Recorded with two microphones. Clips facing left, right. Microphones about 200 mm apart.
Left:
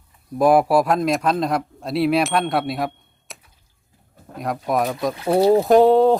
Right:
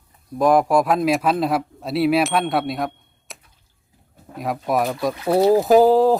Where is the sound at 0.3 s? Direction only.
5° left (ahead or behind).